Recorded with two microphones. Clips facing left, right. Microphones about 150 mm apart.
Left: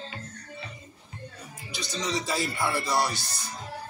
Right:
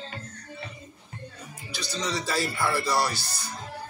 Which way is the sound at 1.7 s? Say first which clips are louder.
Even; 15° left (ahead or behind).